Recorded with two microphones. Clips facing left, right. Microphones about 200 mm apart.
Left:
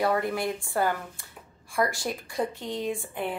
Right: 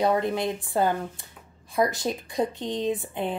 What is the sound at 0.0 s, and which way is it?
Speech, 20° right (ahead or behind).